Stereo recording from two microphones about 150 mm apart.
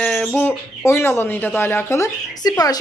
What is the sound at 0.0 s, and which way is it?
A woman's voice, 5° left (ahead or behind).